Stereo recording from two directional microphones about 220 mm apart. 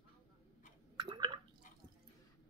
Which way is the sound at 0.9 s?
20° right (ahead or behind).